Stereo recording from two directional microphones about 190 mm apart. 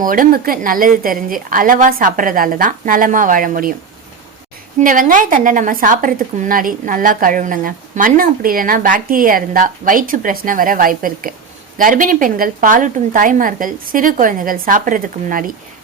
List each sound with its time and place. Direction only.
0.0 s a woman's voice: 45° right (ahead or behind)
4.8 s a woman's voice: 45° right (ahead or behind)